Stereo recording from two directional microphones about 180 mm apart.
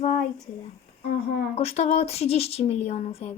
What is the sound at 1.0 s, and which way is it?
Speech, 65° left (ahead or behind).